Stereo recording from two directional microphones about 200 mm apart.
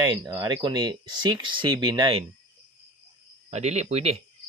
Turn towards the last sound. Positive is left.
turn(degrees=-30)  # may be behind; listen again after turning